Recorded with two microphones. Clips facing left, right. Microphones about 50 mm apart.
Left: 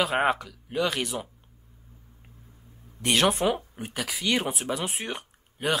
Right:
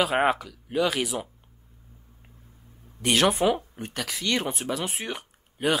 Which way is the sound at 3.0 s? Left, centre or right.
Centre.